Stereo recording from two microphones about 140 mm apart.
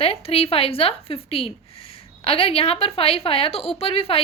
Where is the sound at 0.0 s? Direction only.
45° left (ahead or behind).